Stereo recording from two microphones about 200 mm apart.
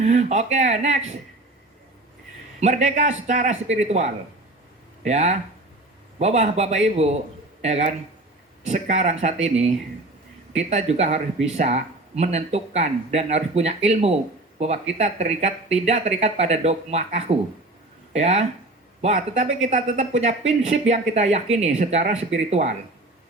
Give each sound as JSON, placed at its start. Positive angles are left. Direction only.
{"t": 0.0, "sound": "speech", "side_deg": -35}
{"t": 2.6, "sound": "speech", "side_deg": -35}